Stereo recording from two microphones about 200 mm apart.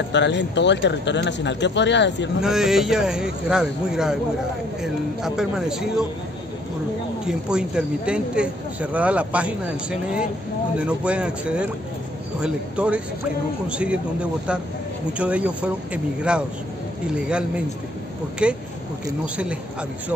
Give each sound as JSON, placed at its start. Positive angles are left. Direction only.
{"t": 0.1, "sound": "speech", "side_deg": 60}
{"t": 2.4, "sound": "speech", "side_deg": 0}
{"t": 7.2, "sound": "speech", "side_deg": -5}
{"t": 15.1, "sound": "speech", "side_deg": -5}